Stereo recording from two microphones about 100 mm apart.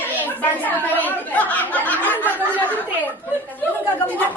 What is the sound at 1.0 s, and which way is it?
Chatter, 15° left (ahead or behind).